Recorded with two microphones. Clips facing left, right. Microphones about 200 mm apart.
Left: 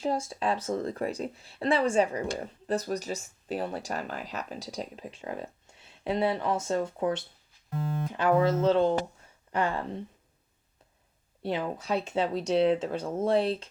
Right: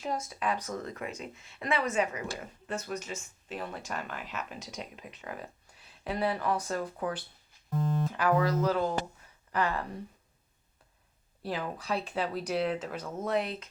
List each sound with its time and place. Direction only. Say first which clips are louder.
0.0 s speech: left 4 dB; 30° left (ahead or behind)
11.4 s speech: left 4 dB; 25° left (ahead or behind)